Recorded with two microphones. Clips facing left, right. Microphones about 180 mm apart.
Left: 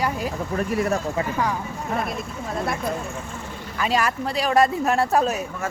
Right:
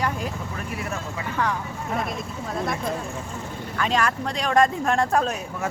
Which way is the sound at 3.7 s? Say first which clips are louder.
Left 1 dB; 10° left (ahead or behind).